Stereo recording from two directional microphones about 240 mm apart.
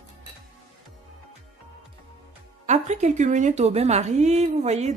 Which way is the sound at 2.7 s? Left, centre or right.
Right.